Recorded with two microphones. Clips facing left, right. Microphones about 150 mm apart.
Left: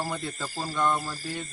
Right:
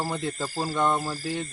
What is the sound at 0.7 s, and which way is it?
Speech, 25° right (ahead or behind).